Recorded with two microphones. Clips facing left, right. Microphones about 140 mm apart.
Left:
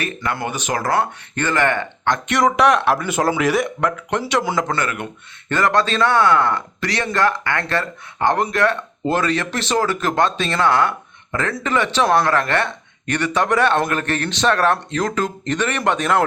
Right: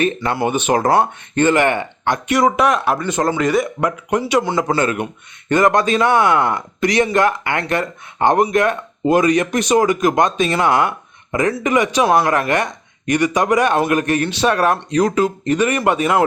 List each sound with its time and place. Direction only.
0.0 s speech: 25° right (ahead or behind)
1.4 s speech: 15° right (ahead or behind); by 3.7 s centre (ahead or behind)
3.8 s speech: 10° right (ahead or behind)
4.8 s speech: 20° right (ahead or behind)